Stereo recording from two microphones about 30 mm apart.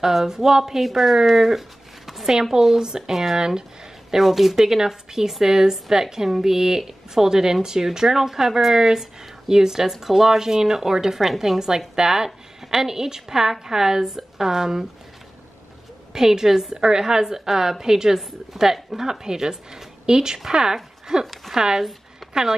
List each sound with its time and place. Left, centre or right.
0.0 s a woman's voice: centre
2.5 s a woman's voice: centre
3.1 s a woman's voice: centre
3.3 s a woman's voice: right
4.1 s a woman's voice: centre
11.1 s a woman's voice: centre
16.1 s a woman's voice: centre
16.7 s a woman's voice: right
22.2 s music: centre